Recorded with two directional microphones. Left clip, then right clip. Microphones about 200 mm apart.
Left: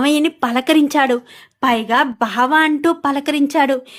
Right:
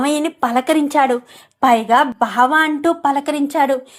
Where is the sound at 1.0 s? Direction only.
45° left (ahead or behind).